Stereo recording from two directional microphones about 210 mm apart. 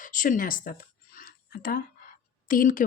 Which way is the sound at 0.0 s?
40° left (ahead or behind).